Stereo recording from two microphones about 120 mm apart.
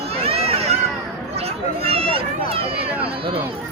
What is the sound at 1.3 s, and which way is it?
Speech, 55° right (ahead or behind).